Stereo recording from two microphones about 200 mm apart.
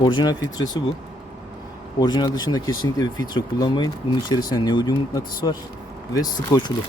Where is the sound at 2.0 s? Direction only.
20° left (ahead or behind).